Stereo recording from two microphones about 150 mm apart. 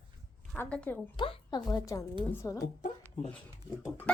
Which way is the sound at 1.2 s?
30° left (ahead or behind).